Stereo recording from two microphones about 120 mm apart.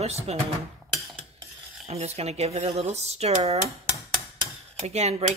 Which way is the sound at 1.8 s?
60° right (ahead or behind).